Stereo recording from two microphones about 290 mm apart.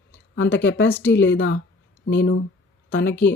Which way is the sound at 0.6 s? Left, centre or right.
Left.